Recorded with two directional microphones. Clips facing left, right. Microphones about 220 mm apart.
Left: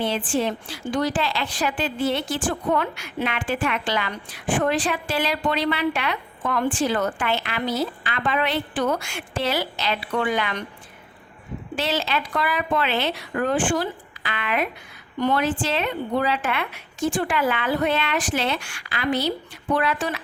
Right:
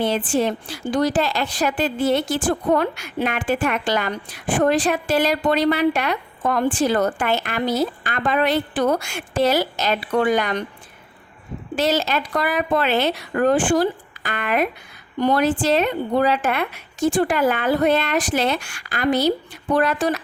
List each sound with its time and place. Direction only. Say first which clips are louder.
0.3 s a woman's voice: right 3 dB; 45° right (ahead or behind)
11.8 s a woman's voice: right 5 dB; 40° right (ahead or behind)